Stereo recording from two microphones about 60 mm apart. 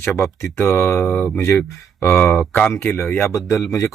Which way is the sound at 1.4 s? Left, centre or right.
Left.